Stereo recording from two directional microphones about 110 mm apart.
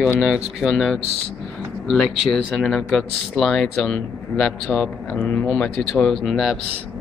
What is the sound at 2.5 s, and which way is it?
Speech, 5° left (ahead or behind).